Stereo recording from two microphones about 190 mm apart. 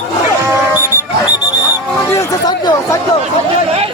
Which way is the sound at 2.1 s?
20° left (ahead or behind).